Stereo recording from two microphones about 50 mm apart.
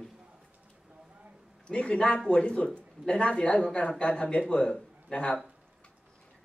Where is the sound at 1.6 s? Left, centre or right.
Left.